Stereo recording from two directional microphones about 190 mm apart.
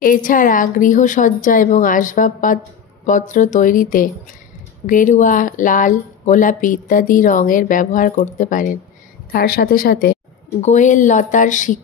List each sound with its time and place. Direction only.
0.0 s speech: 45° left (ahead or behind)
10.6 s speech: 40° left (ahead or behind)